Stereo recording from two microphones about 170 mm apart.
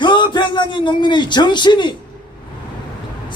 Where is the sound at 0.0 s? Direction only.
25° left (ahead or behind).